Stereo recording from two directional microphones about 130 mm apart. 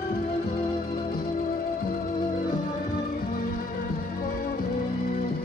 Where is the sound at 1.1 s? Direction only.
90° left.